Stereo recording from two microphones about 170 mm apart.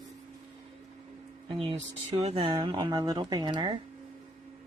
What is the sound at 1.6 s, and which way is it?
Speech, 30° right (ahead or behind).